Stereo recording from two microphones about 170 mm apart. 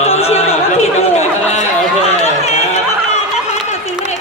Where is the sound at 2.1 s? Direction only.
40° left (ahead or behind).